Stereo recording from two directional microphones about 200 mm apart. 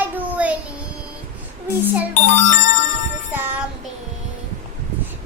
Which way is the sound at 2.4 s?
35° left (ahead or behind).